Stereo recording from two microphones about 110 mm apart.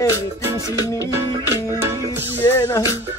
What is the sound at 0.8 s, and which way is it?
Music, 30° left (ahead or behind).